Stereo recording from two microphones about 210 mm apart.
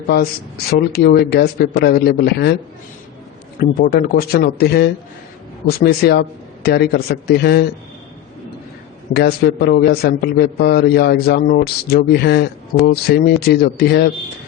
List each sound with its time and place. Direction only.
0.1 s a man's voice: 45° left (ahead or behind)
3.6 s a man's voice: 45° left (ahead or behind)
9.1 s a man's voice: 50° left (ahead or behind)